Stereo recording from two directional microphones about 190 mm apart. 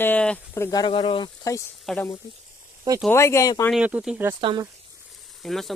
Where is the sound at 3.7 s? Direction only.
5° right (ahead or behind).